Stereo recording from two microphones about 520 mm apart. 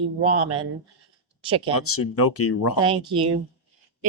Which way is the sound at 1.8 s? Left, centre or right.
Left.